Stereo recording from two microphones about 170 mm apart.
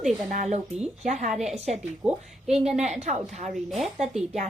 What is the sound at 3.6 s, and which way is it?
Speech, centre (ahead or behind).